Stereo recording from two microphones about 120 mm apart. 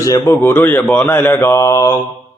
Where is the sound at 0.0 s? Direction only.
25° left (ahead or behind).